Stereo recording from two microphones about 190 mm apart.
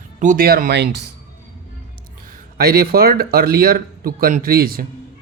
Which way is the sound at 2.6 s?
55° right (ahead or behind).